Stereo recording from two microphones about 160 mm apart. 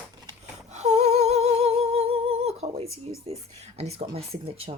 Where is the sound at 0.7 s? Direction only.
45° right (ahead or behind).